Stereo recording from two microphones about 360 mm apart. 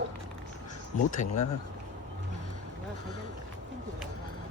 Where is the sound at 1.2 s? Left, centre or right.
Left.